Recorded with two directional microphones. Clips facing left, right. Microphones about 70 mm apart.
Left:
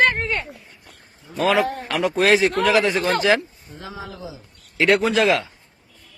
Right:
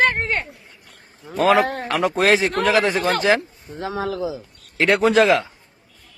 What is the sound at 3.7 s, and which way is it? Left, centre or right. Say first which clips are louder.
Speech: right 10 dB; right.